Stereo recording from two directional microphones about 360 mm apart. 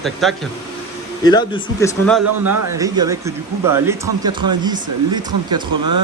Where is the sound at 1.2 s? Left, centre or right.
Centre.